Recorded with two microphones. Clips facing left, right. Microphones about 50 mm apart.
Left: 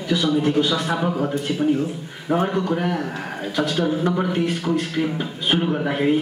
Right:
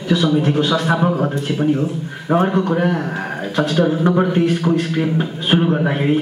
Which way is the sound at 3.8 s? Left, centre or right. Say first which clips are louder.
Right 7 dB; right.